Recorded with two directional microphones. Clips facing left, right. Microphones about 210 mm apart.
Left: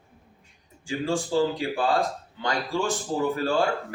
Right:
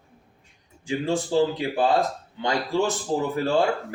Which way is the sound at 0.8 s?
20° right (ahead or behind).